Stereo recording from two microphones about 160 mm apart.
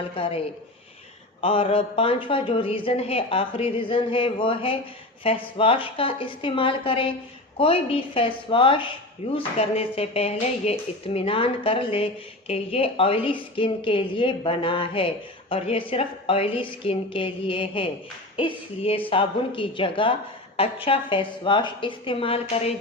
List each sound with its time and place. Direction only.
0.2 s a woman's voice: 35° left (ahead or behind)